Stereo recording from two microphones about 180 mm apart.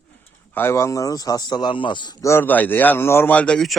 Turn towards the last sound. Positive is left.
turn(degrees=5)  # may be behind; listen again after turning